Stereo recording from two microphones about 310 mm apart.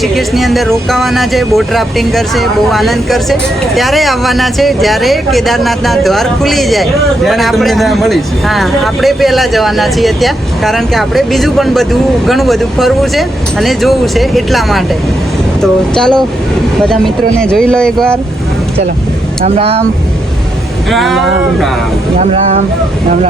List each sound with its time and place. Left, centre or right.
0.0 s speech: centre
19.5 s speech: centre
20.9 s speech: centre
22.2 s speech: right